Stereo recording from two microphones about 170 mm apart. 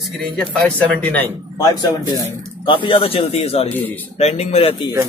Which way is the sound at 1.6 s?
25° left (ahead or behind).